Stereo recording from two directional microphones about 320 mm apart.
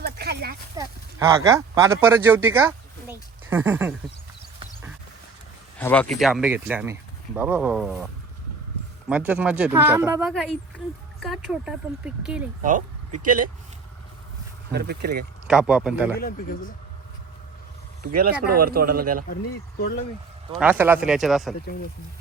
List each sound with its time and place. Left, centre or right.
0.0 s a sound: right
0.8 s speech: centre
5.8 s speech: centre
13.2 s speech: right
14.7 s speech: right
15.4 s speech: centre
16.1 s speech: left
18.2 s speech: right
19.3 s speech: left
20.6 s speech: centre